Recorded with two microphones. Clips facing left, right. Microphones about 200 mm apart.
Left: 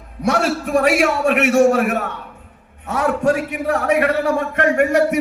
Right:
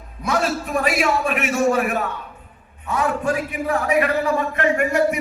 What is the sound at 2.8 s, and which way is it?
A man's voice, 75° left (ahead or behind).